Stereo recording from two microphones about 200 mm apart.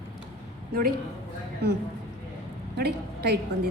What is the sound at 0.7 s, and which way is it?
Speech, 45° right (ahead or behind).